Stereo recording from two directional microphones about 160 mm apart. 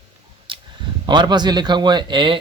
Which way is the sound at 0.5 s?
30° right (ahead or behind).